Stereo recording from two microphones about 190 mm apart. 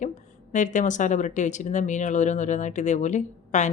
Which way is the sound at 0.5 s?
40° left (ahead or behind).